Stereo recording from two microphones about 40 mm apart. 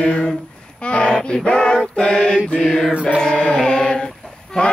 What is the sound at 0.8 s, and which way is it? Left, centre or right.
Male singing, left.